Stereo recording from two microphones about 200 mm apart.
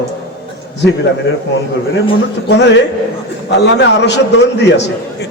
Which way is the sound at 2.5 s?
60° left (ahead or behind).